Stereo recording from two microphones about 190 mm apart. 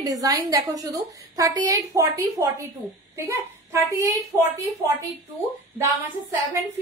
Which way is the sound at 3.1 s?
15° right (ahead or behind).